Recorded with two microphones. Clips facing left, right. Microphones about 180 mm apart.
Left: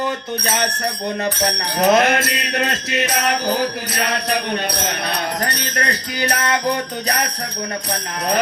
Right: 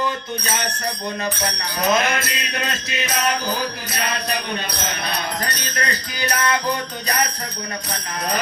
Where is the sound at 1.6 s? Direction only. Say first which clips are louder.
Left 6 dB; 65° left (ahead or behind).